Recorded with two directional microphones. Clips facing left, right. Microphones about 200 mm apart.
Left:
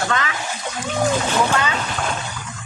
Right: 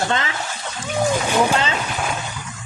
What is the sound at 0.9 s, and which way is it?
Splash, 10° right (ahead or behind).